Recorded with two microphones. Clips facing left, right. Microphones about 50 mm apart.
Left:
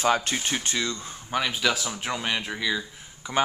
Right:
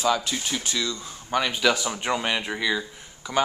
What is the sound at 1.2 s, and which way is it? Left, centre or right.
Speech, centre.